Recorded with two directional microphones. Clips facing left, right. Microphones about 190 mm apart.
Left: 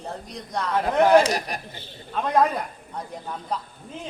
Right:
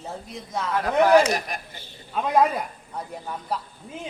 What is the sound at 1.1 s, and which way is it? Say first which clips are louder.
Speech: even; 35° left (ahead or behind).